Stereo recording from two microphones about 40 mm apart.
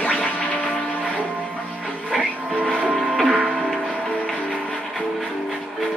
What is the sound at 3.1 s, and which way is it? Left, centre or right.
Music, centre.